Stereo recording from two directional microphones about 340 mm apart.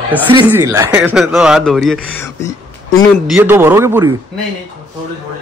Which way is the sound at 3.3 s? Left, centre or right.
Centre.